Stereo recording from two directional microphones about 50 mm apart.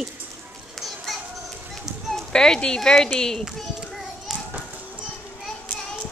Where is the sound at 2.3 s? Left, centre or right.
Centre.